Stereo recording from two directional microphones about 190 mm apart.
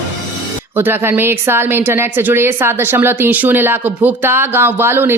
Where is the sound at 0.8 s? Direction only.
10° right (ahead or behind).